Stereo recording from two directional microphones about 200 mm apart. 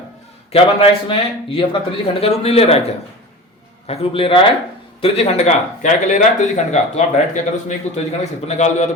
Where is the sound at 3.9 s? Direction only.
30° left (ahead or behind).